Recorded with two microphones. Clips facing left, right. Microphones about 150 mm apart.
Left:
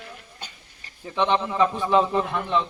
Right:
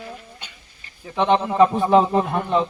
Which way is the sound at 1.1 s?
40° right (ahead or behind).